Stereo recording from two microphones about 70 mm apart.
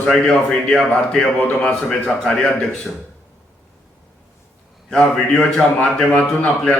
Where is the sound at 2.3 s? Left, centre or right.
Left.